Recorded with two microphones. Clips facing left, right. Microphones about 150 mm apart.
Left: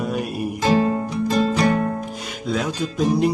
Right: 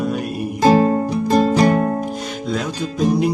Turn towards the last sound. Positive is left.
turn(degrees=0)  # may be behind; listen again after turning